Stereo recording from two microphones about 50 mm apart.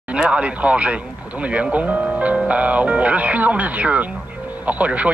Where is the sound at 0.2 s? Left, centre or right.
Right.